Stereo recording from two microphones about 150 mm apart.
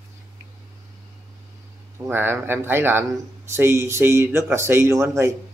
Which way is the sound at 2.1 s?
15° right (ahead or behind).